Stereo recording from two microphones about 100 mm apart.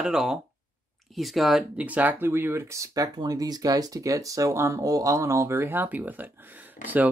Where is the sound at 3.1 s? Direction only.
40° right (ahead or behind); by 7.0 s 15° right (ahead or behind).